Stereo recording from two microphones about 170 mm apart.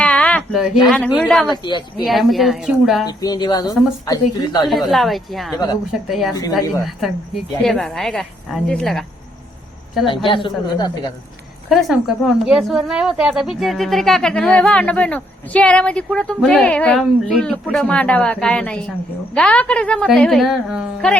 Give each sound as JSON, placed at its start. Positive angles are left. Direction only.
{"t": 0.0, "sound": "a sound", "side_deg": 5}
{"t": 0.5, "sound": "a woman's voice", "side_deg": -5}
{"t": 3.1, "sound": "speech", "side_deg": 20}
{"t": 4.7, "sound": "a woman's voice", "side_deg": 0}
{"t": 5.5, "sound": "speech", "side_deg": 25}
{"t": 6.1, "sound": "a woman's voice", "side_deg": 0}
{"t": 7.6, "sound": "a woman's voice", "side_deg": 0}
{"t": 10.2, "sound": "speech", "side_deg": 30}
{"t": 11.7, "sound": "a woman's voice", "side_deg": 0}